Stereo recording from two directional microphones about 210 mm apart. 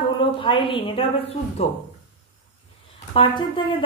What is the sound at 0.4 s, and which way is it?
A woman's voice, 25° left (ahead or behind).